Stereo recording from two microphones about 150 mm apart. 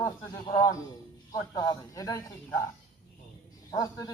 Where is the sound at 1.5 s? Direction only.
20° left (ahead or behind).